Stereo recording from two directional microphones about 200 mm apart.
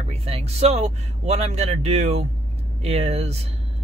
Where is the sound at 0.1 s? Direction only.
30° right (ahead or behind).